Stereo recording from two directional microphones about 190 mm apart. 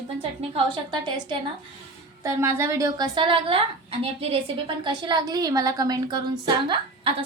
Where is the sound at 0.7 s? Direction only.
25° right (ahead or behind).